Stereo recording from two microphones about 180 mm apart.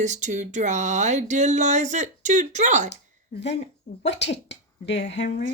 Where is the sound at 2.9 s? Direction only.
75° left (ahead or behind).